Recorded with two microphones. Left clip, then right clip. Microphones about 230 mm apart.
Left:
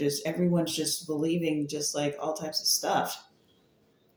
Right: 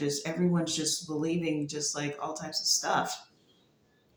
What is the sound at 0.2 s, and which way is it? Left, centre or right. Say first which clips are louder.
Speech: left 3 dB; centre.